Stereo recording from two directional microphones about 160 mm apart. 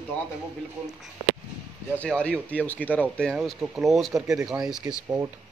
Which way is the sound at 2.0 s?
10° left (ahead or behind).